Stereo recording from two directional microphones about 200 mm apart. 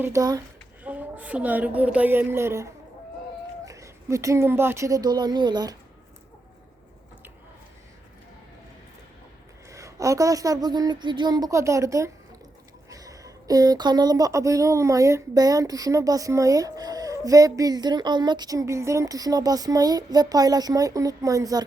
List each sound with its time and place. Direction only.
0.0 s speech: 15° right (ahead or behind)
3.7 s a woman's voice: 15° right (ahead or behind)
9.6 s speech: 15° right (ahead or behind)